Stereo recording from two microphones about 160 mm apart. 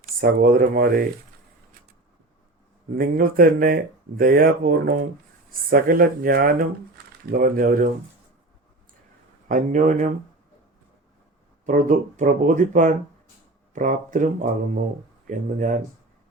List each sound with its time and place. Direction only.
0.0 s speech: 60° right (ahead or behind)
2.9 s speech: 65° right (ahead or behind)
9.5 s speech: 55° right (ahead or behind)
11.6 s speech: 55° right (ahead or behind)
15.3 s speech: 55° right (ahead or behind)